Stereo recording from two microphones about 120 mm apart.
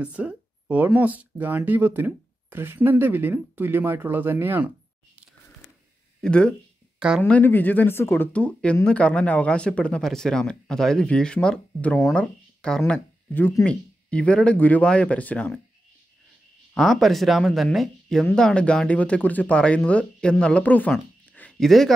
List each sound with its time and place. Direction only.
0.0 s speech: 10° right (ahead or behind)
6.2 s speech: 10° left (ahead or behind)
7.0 s speech: 10° right (ahead or behind)
7.2 s speech: 15° left (ahead or behind)
16.7 s speech: centre (ahead or behind)
20.9 s a sound: 10° left (ahead or behind)